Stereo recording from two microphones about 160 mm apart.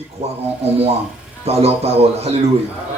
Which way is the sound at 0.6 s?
40° right (ahead or behind).